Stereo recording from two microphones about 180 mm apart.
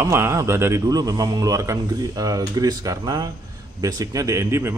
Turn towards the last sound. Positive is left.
turn(degrees=-15)  # may be behind; listen again after turning